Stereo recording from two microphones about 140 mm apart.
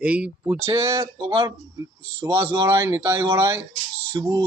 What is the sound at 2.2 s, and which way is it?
Speech, 15° right (ahead or behind).